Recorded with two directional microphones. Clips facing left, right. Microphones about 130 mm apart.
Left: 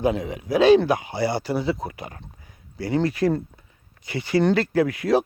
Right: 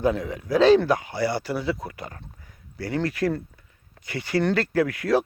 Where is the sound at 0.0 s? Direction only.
20° left (ahead or behind).